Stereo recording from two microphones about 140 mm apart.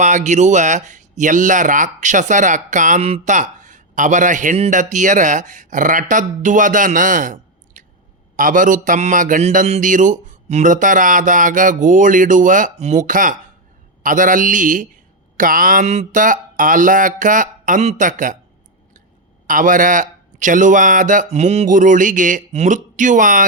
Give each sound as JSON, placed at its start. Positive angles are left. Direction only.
{"t": 0.0, "sound": "a man's voice", "side_deg": -60}
{"t": 15.4, "sound": "speech", "side_deg": -80}
{"t": 15.9, "sound": "speech", "side_deg": -60}
{"t": 19.5, "sound": "speech", "side_deg": -70}
{"t": 21.2, "sound": "speech", "side_deg": -50}